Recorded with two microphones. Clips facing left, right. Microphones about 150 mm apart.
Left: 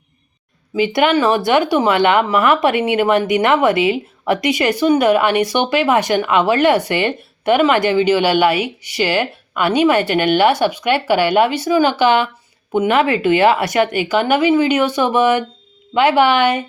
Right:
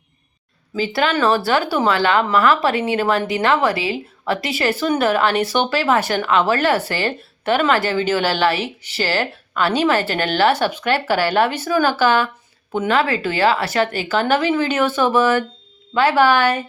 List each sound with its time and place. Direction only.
0.8 s speech: 20° left (ahead or behind)